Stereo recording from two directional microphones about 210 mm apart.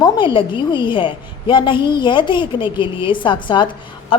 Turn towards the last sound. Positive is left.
turn(degrees=25)  # may be behind; listen again after turning